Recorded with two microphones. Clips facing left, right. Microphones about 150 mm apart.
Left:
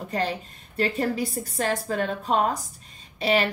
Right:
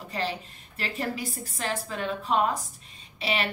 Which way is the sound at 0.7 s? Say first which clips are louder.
Left 7 dB; 35° left (ahead or behind).